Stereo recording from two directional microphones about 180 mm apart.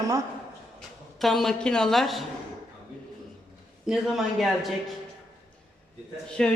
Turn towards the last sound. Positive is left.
turn(degrees=5)  # may be behind; listen again after turning